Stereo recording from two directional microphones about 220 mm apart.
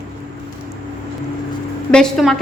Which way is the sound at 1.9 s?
5° left (ahead or behind).